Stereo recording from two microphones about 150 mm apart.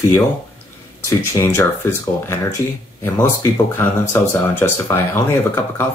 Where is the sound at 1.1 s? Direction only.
20° left (ahead or behind).